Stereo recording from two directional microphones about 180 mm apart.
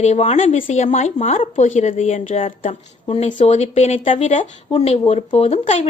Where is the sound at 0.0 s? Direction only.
40° left (ahead or behind).